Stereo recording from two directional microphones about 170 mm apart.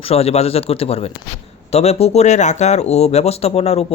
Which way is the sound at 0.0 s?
35° left (ahead or behind).